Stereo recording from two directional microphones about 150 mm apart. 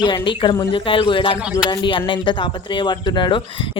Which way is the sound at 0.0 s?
30° left (ahead or behind).